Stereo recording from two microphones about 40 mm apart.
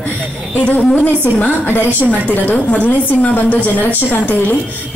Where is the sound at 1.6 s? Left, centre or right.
Left.